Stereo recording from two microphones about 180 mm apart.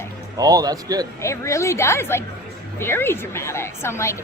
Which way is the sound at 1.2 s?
15° left (ahead or behind).